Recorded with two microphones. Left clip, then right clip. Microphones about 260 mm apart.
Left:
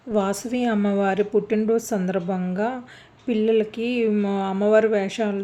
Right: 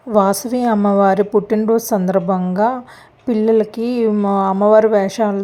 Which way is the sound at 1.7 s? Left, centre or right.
Centre.